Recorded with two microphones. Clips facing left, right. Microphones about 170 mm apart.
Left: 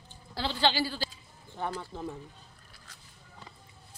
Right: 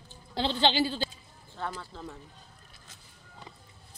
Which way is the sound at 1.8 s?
15° left (ahead or behind).